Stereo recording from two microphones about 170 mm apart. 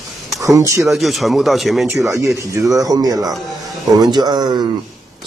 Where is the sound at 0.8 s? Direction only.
Centre (ahead or behind); by 4.6 s 25° right (ahead or behind).